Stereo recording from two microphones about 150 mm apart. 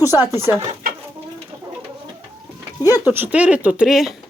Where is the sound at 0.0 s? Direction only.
25° left (ahead or behind).